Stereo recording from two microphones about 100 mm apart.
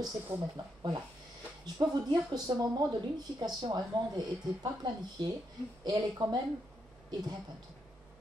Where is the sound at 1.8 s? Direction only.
40° right (ahead or behind).